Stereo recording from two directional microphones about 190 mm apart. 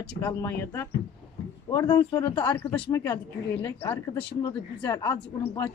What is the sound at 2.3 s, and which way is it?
Speech, 10° left (ahead or behind).